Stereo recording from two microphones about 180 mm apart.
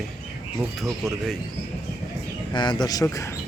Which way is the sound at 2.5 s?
25° left (ahead or behind).